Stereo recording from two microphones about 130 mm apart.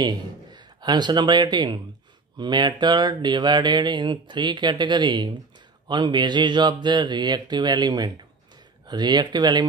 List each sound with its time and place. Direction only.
0.0 s a man's voice: 35° right (ahead or behind)